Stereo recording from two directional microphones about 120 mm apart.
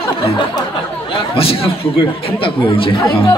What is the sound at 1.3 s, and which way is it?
Speech, 50° left (ahead or behind).